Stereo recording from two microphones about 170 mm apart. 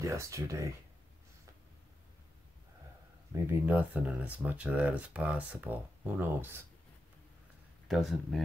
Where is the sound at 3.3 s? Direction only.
15° right (ahead or behind).